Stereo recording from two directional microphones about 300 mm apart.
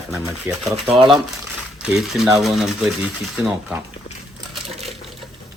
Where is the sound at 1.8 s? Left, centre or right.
Centre.